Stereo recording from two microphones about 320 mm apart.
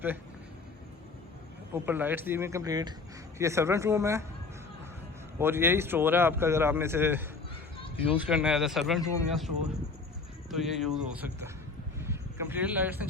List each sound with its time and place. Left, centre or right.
1.7 s speech: centre
5.4 s speech: centre
10.5 s speech: centre
11.9 s a sound: centre